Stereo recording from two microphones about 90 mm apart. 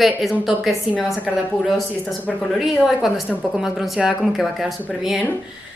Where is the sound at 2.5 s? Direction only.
Centre (ahead or behind).